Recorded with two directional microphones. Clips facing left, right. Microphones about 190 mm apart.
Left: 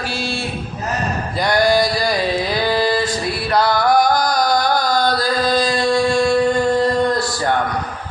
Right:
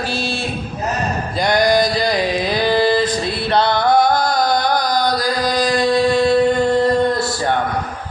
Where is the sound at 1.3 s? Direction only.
20° right (ahead or behind).